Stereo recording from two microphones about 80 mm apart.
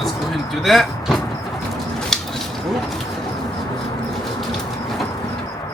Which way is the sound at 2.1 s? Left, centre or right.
Centre.